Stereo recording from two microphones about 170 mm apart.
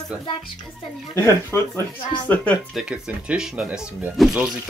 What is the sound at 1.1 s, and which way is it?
Speech, 15° left (ahead or behind).